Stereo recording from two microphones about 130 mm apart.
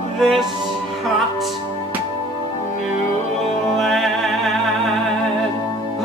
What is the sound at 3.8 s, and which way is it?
Music, centre (ahead or behind).